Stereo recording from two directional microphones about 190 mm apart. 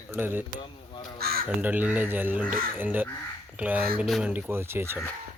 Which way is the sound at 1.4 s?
10° right (ahead or behind).